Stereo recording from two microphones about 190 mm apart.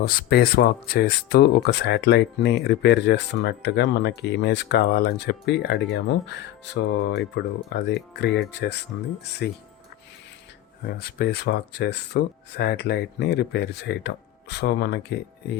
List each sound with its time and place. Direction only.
0.0 s speech: 50° left (ahead or behind)
10.9 s speech: 55° left (ahead or behind)